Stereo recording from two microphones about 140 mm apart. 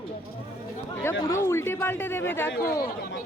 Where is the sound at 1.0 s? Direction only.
15° left (ahead or behind).